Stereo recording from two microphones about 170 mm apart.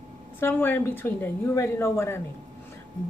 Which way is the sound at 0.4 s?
10° left (ahead or behind).